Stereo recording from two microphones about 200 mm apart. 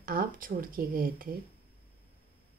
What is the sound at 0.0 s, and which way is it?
Speech, 45° right (ahead or behind).